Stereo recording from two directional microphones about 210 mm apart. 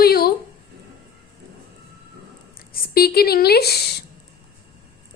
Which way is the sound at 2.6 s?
45° left (ahead or behind).